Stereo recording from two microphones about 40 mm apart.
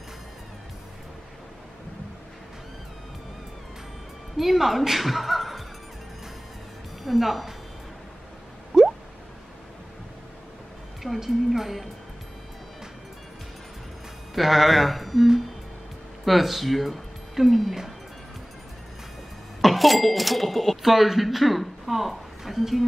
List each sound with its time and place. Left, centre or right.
4.4 s speech: centre
7.0 s a woman's voice: centre
8.7 s drip: centre
11.0 s speech: centre
14.3 s speech: centre
19.6 s speech: centre